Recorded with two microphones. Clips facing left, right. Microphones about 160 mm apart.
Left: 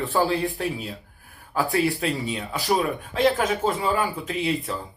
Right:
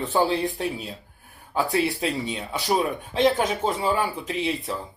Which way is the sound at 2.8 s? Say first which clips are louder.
Right 2 dB; 25° right (ahead or behind).